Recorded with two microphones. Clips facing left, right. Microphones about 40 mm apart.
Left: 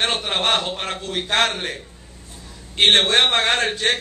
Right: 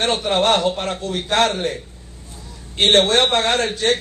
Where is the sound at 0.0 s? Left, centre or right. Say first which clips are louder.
Right 4 dB; left.